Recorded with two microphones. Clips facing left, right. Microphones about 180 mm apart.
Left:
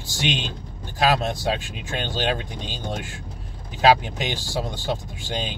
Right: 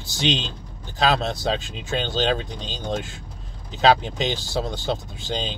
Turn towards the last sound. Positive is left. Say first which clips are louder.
# right 1 dB
turn(degrees=10)  # may be behind; listen again after turning